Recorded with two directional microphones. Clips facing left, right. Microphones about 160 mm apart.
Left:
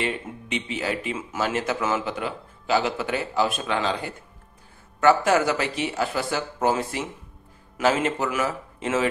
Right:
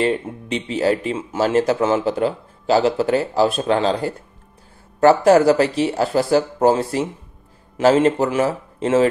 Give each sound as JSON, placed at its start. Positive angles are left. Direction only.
{"t": 0.0, "sound": "speech", "side_deg": -35}